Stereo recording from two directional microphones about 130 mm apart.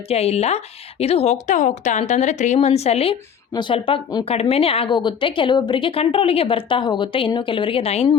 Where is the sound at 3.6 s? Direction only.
40° left (ahead or behind).